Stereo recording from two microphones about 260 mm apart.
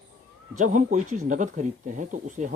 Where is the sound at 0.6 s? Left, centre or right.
Right.